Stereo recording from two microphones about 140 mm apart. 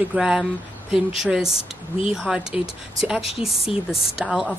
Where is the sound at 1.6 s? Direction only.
45° left (ahead or behind).